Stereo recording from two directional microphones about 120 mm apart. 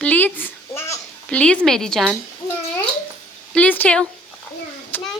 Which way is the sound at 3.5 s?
15° left (ahead or behind).